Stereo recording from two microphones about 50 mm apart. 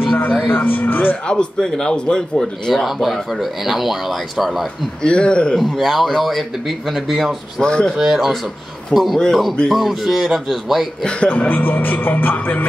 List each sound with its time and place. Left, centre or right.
0.5 s speech: left
1.2 s a man's voice: centre
2.7 s speech: centre
5.0 s speech: centre
5.6 s speech: centre
7.6 s a man's voice: centre
8.0 s speech: centre
11.2 s speech: left